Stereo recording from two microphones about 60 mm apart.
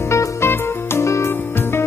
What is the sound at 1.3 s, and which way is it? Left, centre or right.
Music, left.